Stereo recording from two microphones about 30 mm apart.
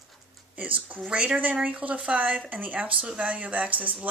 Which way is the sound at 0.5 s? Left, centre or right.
Right.